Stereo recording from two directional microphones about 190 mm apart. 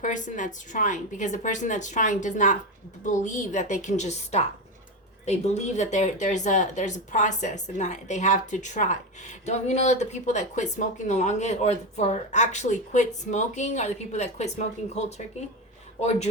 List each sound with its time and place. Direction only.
0.0 s speech: 40° left (ahead or behind)